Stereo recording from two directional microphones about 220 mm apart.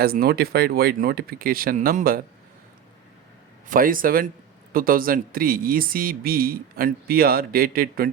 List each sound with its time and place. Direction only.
0.0 s speech: 45° right (ahead or behind)
3.7 s speech: 40° right (ahead or behind)